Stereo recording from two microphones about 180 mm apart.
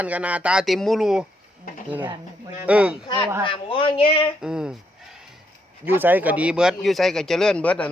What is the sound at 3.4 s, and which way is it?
Speech, 30° left (ahead or behind).